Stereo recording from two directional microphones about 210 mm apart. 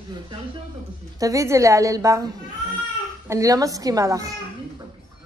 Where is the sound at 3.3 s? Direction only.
15° right (ahead or behind).